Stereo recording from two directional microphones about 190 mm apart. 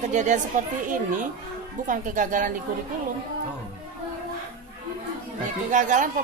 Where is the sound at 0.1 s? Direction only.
40° right (ahead or behind).